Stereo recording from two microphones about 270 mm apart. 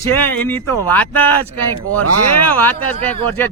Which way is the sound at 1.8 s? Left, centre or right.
Right.